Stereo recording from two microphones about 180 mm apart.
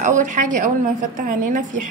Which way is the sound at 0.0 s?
45° right (ahead or behind).